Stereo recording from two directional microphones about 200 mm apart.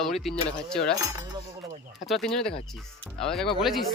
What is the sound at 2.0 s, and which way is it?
Speech, centre (ahead or behind).